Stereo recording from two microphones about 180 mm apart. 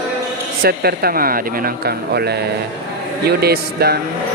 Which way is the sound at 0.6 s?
60° right (ahead or behind).